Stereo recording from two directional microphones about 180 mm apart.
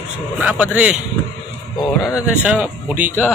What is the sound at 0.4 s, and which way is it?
Speech, 5° right (ahead or behind).